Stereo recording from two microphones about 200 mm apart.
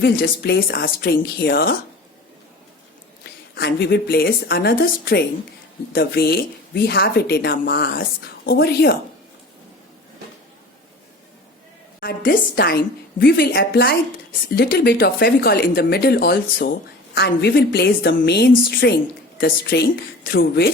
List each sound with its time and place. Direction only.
0.0 s speech: 50° left (ahead or behind)
3.5 s speech: 55° left (ahead or behind)
11.9 s a woman's voice: 45° left (ahead or behind)